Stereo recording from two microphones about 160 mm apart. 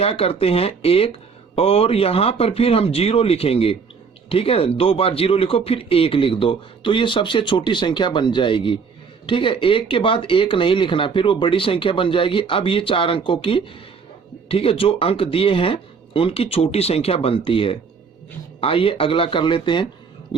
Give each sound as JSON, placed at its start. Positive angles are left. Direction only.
{"t": 0.0, "sound": "speech", "side_deg": 35}